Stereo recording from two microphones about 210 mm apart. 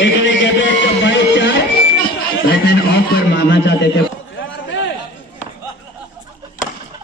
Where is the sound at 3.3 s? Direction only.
55° left (ahead or behind).